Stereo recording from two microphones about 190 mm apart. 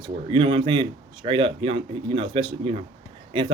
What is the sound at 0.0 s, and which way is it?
Speech, 25° right (ahead or behind).